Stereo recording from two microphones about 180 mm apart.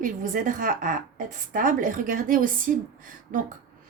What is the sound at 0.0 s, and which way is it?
A woman's voice, 45° right (ahead or behind).